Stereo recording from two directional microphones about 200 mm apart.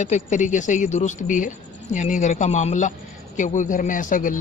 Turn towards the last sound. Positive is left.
turn(degrees=40)  # may be behind; listen again after turning